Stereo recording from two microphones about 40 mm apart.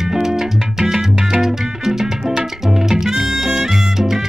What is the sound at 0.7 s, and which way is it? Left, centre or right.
Salsa music, centre.